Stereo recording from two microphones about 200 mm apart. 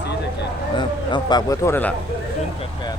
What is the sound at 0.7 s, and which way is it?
A man's voice, 20° left (ahead or behind).